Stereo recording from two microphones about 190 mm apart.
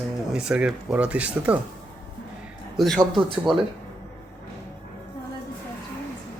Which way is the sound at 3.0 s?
25° right (ahead or behind).